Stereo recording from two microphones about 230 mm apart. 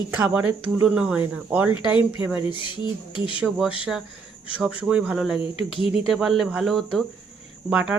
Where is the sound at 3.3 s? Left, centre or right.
Centre.